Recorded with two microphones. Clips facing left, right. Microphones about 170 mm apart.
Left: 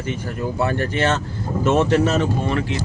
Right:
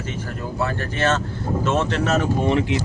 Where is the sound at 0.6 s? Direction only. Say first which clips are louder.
Left 2 dB; 15° left (ahead or behind).